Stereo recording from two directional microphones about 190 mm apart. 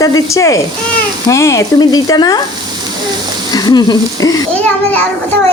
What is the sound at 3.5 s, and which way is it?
Speech, 20° left (ahead or behind).